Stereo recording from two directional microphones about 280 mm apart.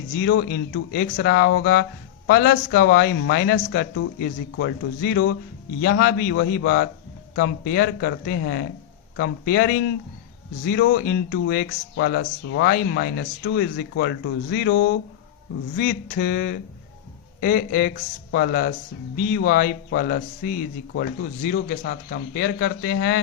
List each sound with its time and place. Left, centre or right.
0.2 s speech: left